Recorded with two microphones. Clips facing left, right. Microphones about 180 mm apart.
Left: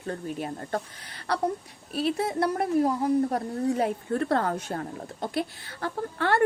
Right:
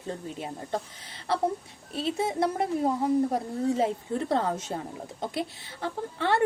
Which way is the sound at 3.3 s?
25° right (ahead or behind).